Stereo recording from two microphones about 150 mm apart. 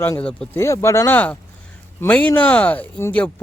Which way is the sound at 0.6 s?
20° left (ahead or behind).